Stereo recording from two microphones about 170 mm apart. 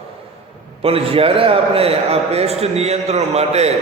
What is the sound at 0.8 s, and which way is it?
A man's voice, 35° right (ahead or behind).